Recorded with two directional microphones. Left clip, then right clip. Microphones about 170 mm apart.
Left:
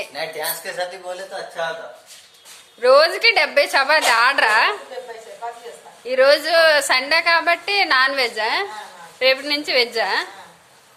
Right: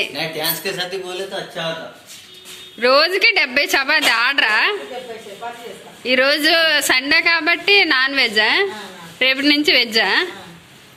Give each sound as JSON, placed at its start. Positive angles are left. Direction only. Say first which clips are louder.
{"t": 0.1, "sound": "speech", "louder": "right 3 dB", "side_deg": 75}
{"t": 2.8, "sound": "a woman's voice", "louder": "even", "side_deg": 10}
{"t": 6.1, "sound": "a woman's voice", "louder": "even", "side_deg": 5}